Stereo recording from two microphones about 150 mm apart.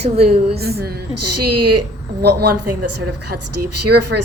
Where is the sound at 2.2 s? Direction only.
90° right.